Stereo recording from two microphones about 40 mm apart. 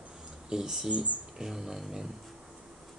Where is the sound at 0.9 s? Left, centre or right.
Right.